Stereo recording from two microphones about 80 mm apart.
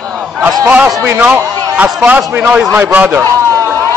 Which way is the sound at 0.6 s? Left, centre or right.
Centre.